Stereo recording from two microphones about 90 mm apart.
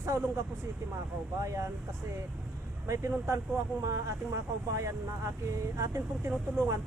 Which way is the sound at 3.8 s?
35° right (ahead or behind).